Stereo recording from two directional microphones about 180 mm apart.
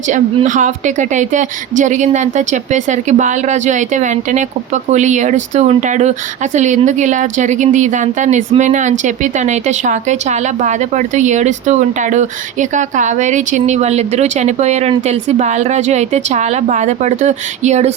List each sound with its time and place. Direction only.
0.1 s a woman's voice: 45° right (ahead or behind)